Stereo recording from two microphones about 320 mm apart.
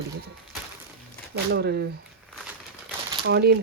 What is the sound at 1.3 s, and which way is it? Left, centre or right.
Speech, right.